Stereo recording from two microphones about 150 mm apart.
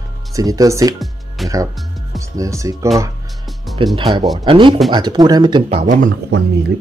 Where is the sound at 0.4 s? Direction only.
25° right (ahead or behind).